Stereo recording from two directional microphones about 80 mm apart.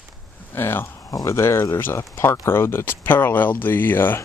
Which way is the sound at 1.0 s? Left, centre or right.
Left.